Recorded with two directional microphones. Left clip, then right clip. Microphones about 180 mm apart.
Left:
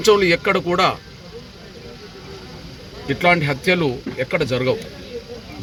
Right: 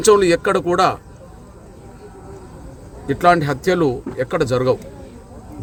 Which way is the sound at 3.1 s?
20° right (ahead or behind).